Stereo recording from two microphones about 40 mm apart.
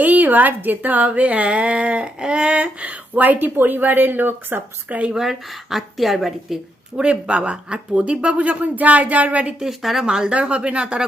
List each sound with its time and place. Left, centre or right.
0.0 s speech: right
2.1 s speech: right
3.3 s speech: right
5.1 s a woman's voice: centre
6.9 s speech: right
9.6 s speech: centre
10.1 s speech: right